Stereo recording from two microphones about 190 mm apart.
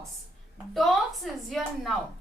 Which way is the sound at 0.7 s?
Centre (ahead or behind).